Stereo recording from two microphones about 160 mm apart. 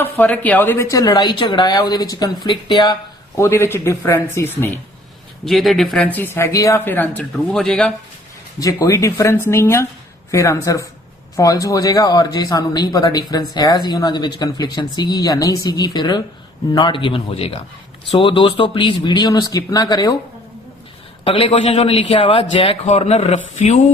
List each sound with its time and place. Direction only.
0.0 s a man's voice: 10° left (ahead or behind)
5.5 s speech: centre (ahead or behind)
8.5 s a man's voice: 20° left (ahead or behind)
21.2 s a man's voice: 35° left (ahead or behind)